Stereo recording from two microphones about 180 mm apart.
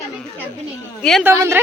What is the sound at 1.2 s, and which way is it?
Speech, 15° right (ahead or behind).